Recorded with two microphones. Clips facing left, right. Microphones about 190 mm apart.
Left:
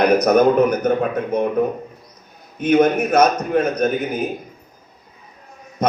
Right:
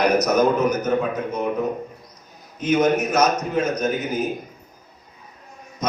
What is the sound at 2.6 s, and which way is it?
A man's voice, 60° left (ahead or behind).